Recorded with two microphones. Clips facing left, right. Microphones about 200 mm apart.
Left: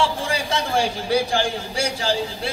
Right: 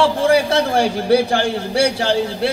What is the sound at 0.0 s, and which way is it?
A man's voice, 65° right (ahead or behind).